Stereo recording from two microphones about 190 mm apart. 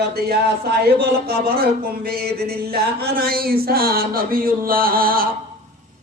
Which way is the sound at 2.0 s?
55° right (ahead or behind).